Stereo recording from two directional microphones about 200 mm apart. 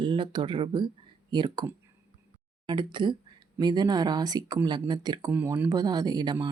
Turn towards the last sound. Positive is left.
turn(degrees=-20)  # may be behind; listen again after turning